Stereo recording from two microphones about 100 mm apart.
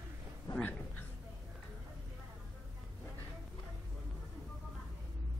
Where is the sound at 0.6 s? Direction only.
20° left (ahead or behind).